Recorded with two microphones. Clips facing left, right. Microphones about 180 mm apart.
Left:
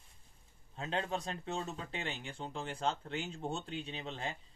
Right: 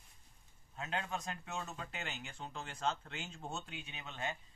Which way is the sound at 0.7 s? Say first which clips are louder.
Left 4 dB; 30° left (ahead or behind).